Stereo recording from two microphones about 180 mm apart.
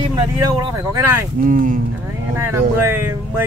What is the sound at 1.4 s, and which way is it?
Speech, 50° right (ahead or behind).